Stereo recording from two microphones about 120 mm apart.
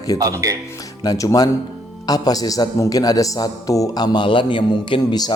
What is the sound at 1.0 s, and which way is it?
A man's voice, 30° left (ahead or behind).